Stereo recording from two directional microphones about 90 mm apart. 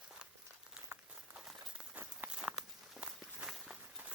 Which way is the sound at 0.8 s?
20° right (ahead or behind).